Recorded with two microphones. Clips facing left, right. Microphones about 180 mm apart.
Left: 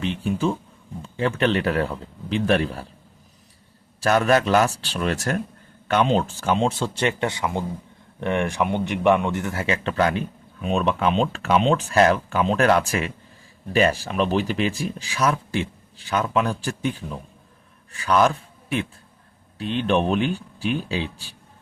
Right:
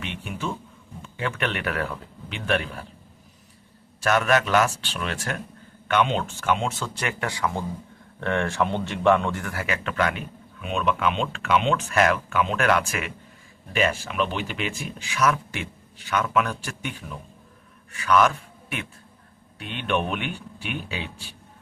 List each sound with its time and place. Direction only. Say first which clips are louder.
0.0 s speech: left 8 dB; 35° left (ahead or behind)
4.0 s a man's voice: left 3 dB; 35° left (ahead or behind)